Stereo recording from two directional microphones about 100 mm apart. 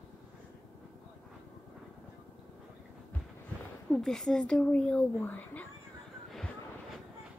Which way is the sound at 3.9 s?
5° left (ahead or behind).